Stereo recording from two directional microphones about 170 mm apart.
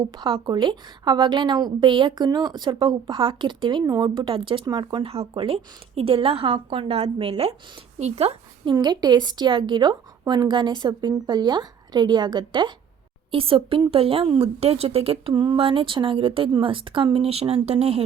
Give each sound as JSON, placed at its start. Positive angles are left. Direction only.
{"t": 0.0, "sound": "a woman's voice", "side_deg": -25}
{"t": 8.7, "sound": "a woman's voice", "side_deg": -25}